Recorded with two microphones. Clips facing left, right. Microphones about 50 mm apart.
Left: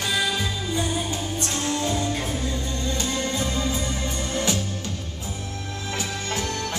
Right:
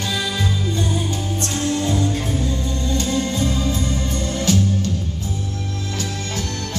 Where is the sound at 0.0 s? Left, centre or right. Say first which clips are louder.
Right 1 dB; centre.